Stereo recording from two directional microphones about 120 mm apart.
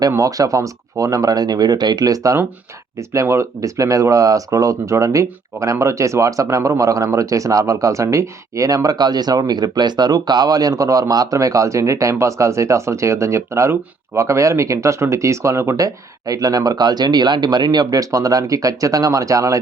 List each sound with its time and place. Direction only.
0.1 s speech: 30° right (ahead or behind)